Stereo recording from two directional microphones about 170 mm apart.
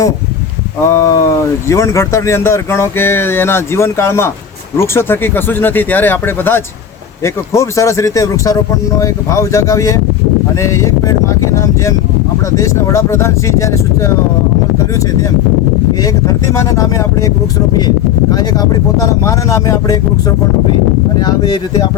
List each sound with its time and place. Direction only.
0.9 s speech: 15° left (ahead or behind)
12.5 s speech: 20° left (ahead or behind)
16.2 s speech: 20° left (ahead or behind)
21.2 s speech: 25° left (ahead or behind)